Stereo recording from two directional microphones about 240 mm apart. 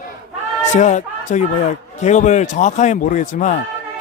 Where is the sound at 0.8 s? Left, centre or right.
Left.